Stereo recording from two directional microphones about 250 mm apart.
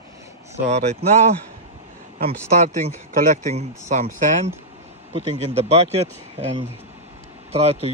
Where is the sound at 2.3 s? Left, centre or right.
Right.